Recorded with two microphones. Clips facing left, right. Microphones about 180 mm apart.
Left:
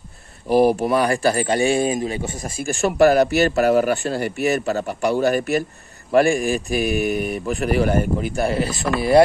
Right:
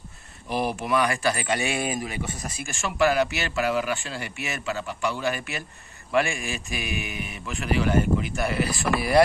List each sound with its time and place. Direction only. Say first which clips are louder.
0.5 s speech: left 10 dB; 35° left (ahead or behind)